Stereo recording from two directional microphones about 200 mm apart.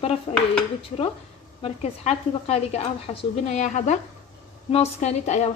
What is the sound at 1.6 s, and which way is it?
Speech, 30° left (ahead or behind).